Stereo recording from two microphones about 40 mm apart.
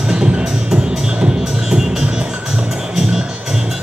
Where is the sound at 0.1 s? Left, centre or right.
Centre.